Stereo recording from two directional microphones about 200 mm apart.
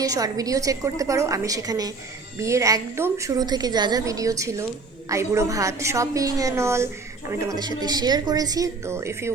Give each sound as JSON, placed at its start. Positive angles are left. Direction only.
{"t": 0.0, "sound": "a woman's voice", "side_deg": -15}